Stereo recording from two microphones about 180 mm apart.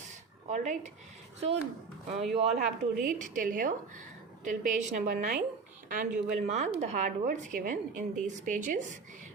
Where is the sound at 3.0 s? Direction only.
45° right (ahead or behind).